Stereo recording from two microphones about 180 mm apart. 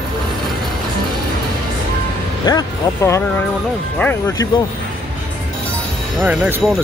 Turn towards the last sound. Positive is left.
turn(degrees=-10)  # may be behind; listen again after turning